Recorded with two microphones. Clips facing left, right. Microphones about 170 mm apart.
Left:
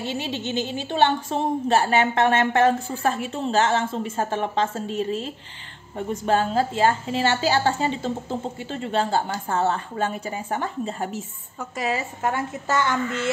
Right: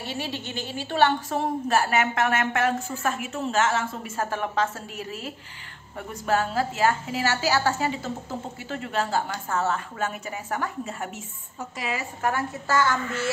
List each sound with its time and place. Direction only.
0.0 s a woman's voice: 20° left (ahead or behind); by 12.0 s 40° left (ahead or behind)
12.2 s a woman's voice: 20° left (ahead or behind)